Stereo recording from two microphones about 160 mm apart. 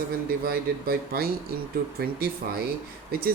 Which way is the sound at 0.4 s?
75° right (ahead or behind).